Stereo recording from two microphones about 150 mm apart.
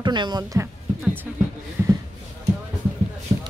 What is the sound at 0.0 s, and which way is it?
Speech, 30° right (ahead or behind).